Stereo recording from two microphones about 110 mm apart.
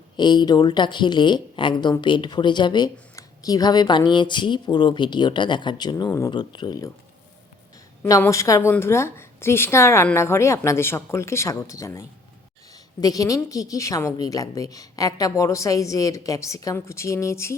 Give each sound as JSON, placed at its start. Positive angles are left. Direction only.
{"t": 0.2, "sound": "a woman's voice", "side_deg": 40}
{"t": 6.1, "sound": "speech", "side_deg": 25}
{"t": 6.3, "sound": "a woman's voice", "side_deg": 40}
{"t": 8.3, "sound": "a woman's voice", "side_deg": 30}